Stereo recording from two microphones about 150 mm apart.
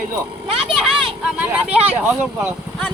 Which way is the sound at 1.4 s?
10° right (ahead or behind).